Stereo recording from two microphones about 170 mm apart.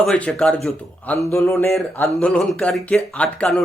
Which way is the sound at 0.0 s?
5° left (ahead or behind).